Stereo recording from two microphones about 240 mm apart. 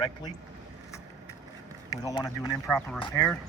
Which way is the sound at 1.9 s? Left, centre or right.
Centre.